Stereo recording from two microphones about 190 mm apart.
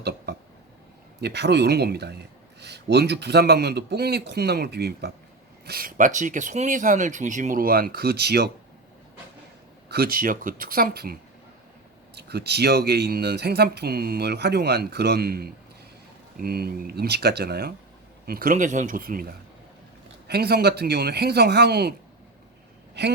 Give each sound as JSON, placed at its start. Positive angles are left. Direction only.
{"t": 1.2, "sound": "speech", "side_deg": -65}
{"t": 9.9, "sound": "speech", "side_deg": -50}
{"t": 23.0, "sound": "speech", "side_deg": -65}